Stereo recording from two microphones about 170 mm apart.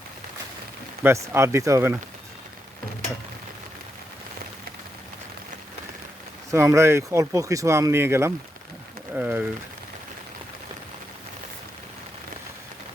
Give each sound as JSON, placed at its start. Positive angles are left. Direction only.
{"t": 1.0, "sound": "speech", "side_deg": -15}
{"t": 6.5, "sound": "speech", "side_deg": -15}